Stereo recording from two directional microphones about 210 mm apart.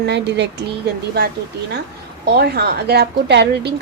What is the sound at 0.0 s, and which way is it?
Speech, 55° right (ahead or behind).